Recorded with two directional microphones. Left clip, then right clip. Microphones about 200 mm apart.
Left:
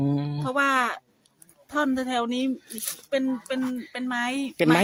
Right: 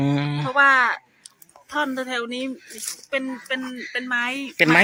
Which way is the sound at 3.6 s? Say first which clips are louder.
Left 1 dB; 15° left (ahead or behind).